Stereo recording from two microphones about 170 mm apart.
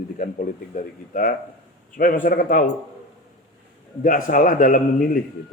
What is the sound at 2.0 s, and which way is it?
Speech, 55° left (ahead or behind).